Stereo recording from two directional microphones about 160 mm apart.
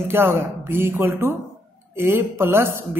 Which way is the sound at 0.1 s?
15° right (ahead or behind).